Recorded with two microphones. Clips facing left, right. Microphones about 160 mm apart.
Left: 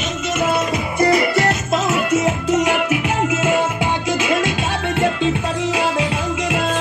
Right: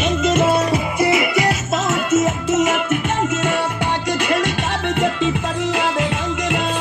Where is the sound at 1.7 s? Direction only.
Centre (ahead or behind).